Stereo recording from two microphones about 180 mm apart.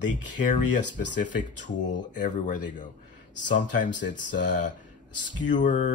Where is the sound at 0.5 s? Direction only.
45° left (ahead or behind).